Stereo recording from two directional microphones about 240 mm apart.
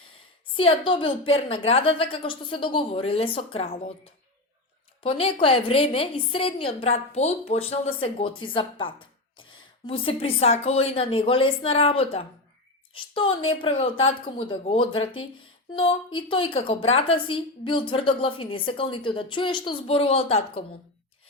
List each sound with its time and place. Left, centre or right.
0.5 s a woman's voice: left
5.0 s a woman's voice: left